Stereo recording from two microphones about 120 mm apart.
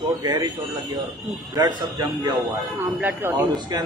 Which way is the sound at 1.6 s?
35° right (ahead or behind).